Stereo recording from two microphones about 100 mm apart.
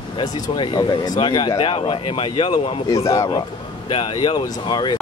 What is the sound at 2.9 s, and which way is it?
Speech, 35° left (ahead or behind).